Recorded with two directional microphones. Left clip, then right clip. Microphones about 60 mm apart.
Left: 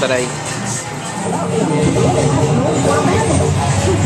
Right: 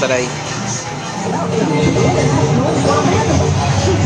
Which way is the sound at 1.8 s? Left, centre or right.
Left.